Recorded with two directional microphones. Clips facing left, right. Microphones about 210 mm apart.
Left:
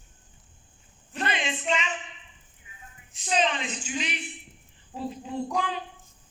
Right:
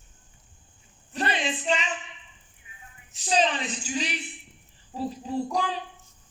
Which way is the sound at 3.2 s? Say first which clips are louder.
Right 2 dB; 35° right (ahead or behind).